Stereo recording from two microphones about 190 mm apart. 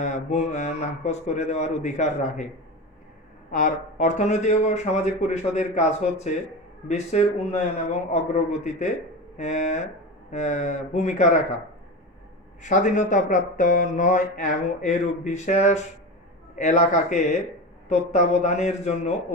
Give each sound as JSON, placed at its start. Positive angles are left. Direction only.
{"t": 0.0, "sound": "speech", "side_deg": 40}
{"t": 3.5, "sound": "speech", "side_deg": 40}
{"t": 9.4, "sound": "speech", "side_deg": 40}
{"t": 12.6, "sound": "speech", "side_deg": 40}